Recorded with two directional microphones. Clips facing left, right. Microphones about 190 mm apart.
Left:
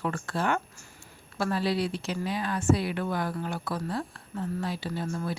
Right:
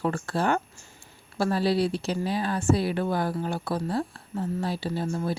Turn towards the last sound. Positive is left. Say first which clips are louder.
# right 4 dB
turn(degrees=-30)  # may be behind; listen again after turning